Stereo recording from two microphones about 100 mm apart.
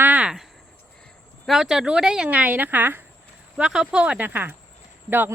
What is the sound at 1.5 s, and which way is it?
Speech, 5° right (ahead or behind).